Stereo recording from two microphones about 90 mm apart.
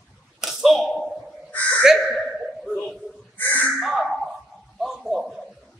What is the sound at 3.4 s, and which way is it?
Crow, 15° left (ahead or behind).